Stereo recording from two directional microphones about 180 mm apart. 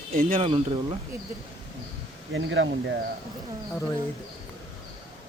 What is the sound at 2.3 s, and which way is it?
Speech, 90° right.